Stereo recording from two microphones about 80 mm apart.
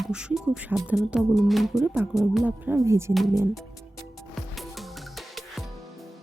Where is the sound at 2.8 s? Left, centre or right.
Right.